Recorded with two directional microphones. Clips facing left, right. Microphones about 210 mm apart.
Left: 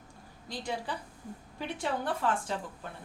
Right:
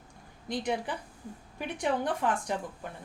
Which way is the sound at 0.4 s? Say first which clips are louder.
Right 5 dB; 20° right (ahead or behind).